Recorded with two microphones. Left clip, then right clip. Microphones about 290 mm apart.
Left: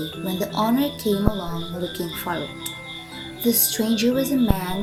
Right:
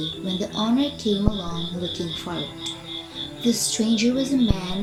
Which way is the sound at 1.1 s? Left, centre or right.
Left.